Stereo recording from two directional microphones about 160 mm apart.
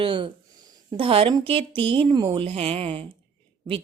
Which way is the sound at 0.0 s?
30° right (ahead or behind).